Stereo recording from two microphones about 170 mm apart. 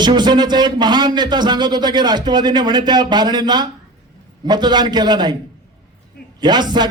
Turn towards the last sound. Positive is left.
turn(degrees=-25)  # may be behind; listen again after turning